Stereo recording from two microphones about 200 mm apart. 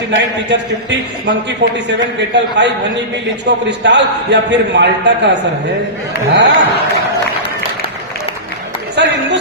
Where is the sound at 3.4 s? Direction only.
60° right (ahead or behind).